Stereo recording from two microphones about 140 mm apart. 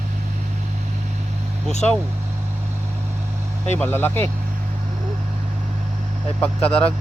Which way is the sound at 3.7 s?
15° left (ahead or behind).